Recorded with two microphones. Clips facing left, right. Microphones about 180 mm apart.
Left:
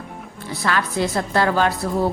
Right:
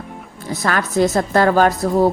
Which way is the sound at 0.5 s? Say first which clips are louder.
Right 4 dB; 45° right (ahead or behind).